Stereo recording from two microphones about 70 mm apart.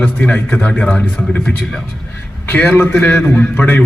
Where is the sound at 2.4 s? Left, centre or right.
Left.